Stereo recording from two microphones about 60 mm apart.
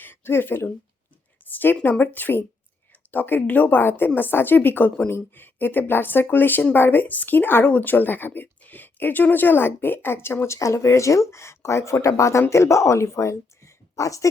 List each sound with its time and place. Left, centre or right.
0.0 s speech: left